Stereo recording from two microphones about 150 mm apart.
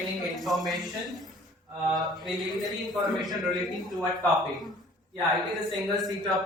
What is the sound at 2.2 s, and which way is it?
A man's voice, centre (ahead or behind).